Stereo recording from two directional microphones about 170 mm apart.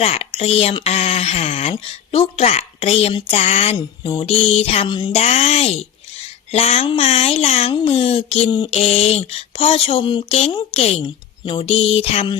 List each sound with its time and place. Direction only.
0.0 s speech: 40° left (ahead or behind)
5.1 s speech: 40° left (ahead or behind)